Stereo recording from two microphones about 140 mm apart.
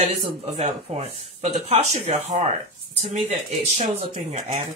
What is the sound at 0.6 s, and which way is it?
Speech, 50° right (ahead or behind).